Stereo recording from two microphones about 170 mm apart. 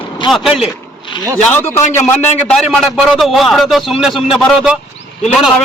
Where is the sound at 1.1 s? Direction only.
25° left (ahead or behind).